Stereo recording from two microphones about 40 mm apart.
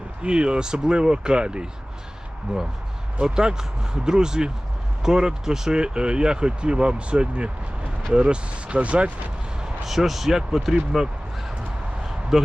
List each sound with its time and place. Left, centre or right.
0.2 s speech: right
3.2 s speech: right
9.8 s speech: centre
12.3 s speech: centre